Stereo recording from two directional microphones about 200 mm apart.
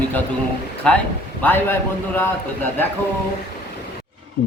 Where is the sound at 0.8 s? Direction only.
5° left (ahead or behind).